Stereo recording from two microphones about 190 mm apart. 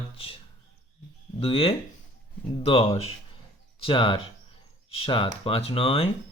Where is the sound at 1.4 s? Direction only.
30° left (ahead or behind).